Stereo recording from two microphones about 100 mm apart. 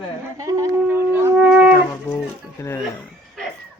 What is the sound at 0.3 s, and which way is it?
Humming, 35° right (ahead or behind).